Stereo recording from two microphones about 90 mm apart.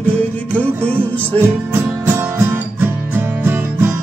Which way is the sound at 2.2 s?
25° right (ahead or behind).